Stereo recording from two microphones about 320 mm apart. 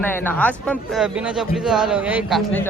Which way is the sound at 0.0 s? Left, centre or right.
Centre.